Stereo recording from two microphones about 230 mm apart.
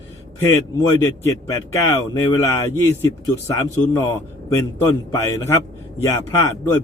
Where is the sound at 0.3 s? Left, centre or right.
Centre.